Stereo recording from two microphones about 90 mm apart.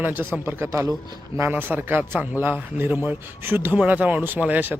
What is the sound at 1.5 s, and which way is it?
A man's voice, 20° right (ahead or behind).